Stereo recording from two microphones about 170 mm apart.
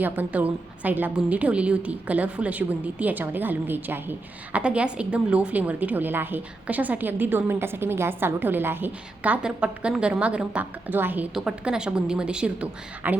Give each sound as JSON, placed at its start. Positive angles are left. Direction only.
{"t": 0.0, "sound": "a woman's voice", "side_deg": -10}